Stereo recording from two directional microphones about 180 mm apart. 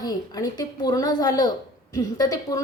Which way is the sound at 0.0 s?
20° left (ahead or behind).